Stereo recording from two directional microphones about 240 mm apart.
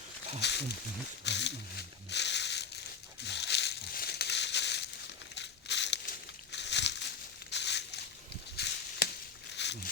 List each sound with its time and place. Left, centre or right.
0.4 s speech: left
3.2 s crumpling: left
5.3 s a sound: left